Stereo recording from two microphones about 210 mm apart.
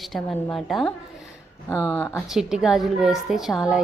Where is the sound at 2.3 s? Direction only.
Centre (ahead or behind).